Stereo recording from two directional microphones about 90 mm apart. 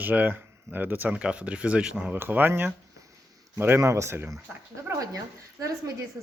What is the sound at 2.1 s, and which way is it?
Speech, 20° right (ahead or behind).